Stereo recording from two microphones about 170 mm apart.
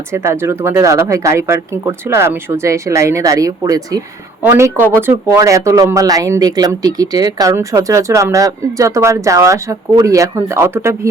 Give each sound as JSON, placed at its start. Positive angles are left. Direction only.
{"t": 0.1, "sound": "speech", "side_deg": -15}